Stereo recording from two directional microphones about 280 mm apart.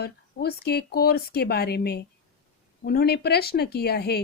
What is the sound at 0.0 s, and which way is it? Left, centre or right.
Speech, left.